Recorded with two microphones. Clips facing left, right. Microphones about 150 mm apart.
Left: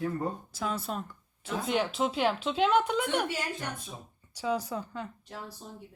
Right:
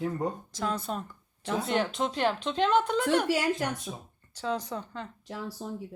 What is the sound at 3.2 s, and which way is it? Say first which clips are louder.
Speech: right 7 dB; 90° right.